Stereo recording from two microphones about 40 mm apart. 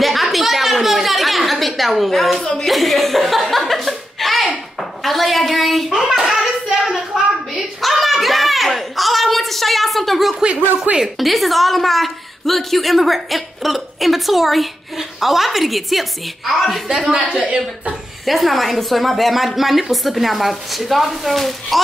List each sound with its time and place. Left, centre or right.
0.0 s a sound: centre
2.4 s speech: centre
2.7 s chuckle: centre
5.0 s a sound: centre
5.9 s hands: centre
7.8 s a sound: centre
11.0 s a woman's voice: centre
17.1 s a woman's voice: centre
18.2 s a woman's voice: centre